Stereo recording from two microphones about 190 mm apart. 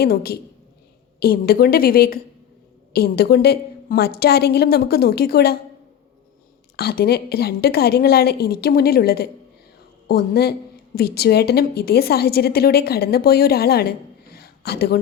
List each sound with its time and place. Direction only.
0.0 s a woman's voice: 55° left (ahead or behind)
6.7 s a woman's voice: 55° left (ahead or behind)